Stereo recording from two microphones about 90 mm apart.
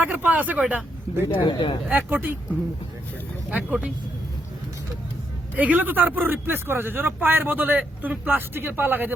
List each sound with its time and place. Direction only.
0.0 s speech: 20° right (ahead or behind)
1.3 s speech: 65° left (ahead or behind)
1.9 s speech: 25° right (ahead or behind)
2.1 s speech: 10° right (ahead or behind)
5.5 s speech: 20° right (ahead or behind)